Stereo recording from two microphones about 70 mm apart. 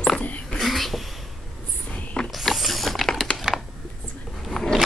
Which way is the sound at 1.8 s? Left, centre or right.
Centre.